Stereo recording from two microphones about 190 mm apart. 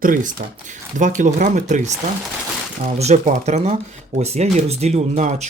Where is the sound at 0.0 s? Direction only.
45° right (ahead or behind).